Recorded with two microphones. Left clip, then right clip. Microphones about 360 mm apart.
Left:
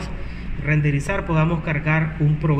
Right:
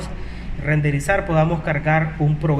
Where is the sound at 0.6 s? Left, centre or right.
Right.